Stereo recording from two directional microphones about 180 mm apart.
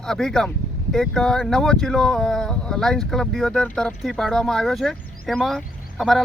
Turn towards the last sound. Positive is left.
turn(degrees=0)  # may be behind; listen again after turning